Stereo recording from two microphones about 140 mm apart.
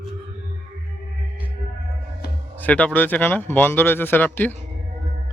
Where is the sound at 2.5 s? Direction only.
10° left (ahead or behind).